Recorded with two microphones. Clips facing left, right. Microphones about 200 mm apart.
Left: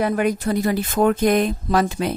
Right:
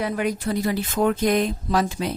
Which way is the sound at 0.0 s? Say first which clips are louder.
Left 4 dB; 50° left (ahead or behind).